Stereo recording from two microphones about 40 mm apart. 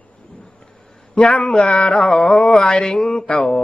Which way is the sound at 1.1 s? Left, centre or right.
Left.